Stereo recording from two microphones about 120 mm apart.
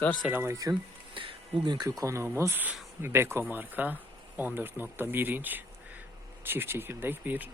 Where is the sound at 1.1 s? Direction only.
45° right (ahead or behind).